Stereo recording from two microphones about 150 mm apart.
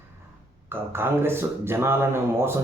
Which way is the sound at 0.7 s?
15° right (ahead or behind).